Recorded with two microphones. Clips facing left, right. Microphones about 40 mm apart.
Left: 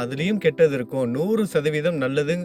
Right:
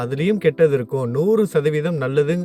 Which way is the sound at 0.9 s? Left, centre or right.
Centre.